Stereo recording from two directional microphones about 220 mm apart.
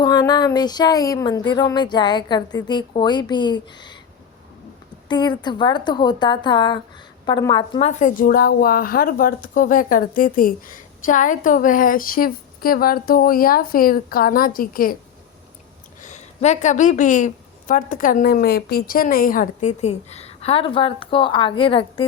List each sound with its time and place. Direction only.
0.0 s speech: 20° left (ahead or behind)
5.0 s a woman's voice: 20° left (ahead or behind); by 14.9 s 40° left (ahead or behind)
16.0 s a woman's voice: 35° left (ahead or behind)